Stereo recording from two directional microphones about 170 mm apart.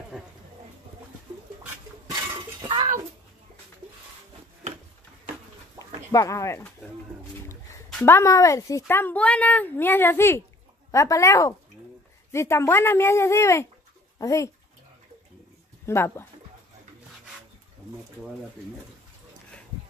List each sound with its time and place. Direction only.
0.1 s a sound: centre (ahead or behind)
6.1 s speech: 15° left (ahead or behind)
15.8 s speech: 15° left (ahead or behind)